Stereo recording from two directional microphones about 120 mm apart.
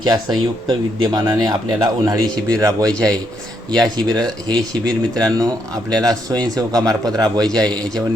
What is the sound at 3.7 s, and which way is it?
Speech, 5° left (ahead or behind).